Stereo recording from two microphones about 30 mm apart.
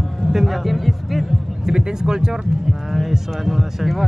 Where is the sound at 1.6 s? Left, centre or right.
Right.